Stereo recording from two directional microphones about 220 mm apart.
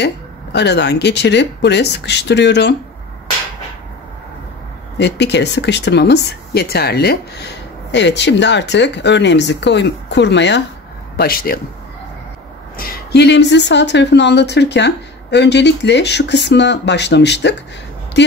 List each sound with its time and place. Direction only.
0.0 s speech: 50° left (ahead or behind)
4.9 s speech: 50° left (ahead or behind)
12.7 s speech: 45° left (ahead or behind)